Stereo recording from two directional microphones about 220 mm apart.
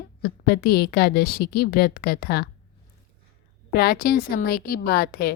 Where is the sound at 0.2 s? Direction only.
45° left (ahead or behind).